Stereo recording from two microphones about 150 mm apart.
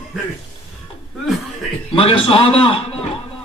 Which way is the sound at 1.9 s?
40° left (ahead or behind).